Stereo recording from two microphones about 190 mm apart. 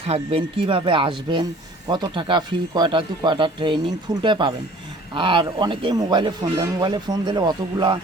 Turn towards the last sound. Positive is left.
turn(degrees=-25)  # may be behind; listen again after turning